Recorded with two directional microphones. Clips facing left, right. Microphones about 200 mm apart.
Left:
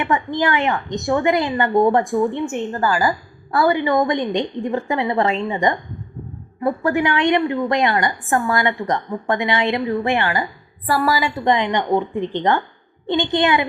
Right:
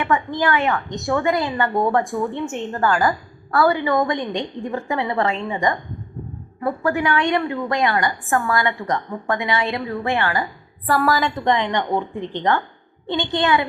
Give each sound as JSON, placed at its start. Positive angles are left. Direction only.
{"t": 0.0, "sound": "a woman's voice", "side_deg": 20}
{"t": 2.7, "sound": "a woman's voice", "side_deg": 5}
{"t": 3.5, "sound": "a woman's voice", "side_deg": 15}
{"t": 10.8, "sound": "a woman's voice", "side_deg": 5}
{"t": 11.4, "sound": "a woman's voice", "side_deg": 15}